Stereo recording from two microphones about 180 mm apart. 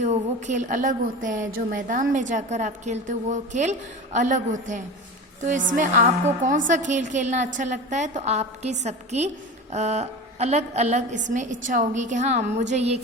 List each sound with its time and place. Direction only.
0.0 s a woman's voice: 40° right (ahead or behind)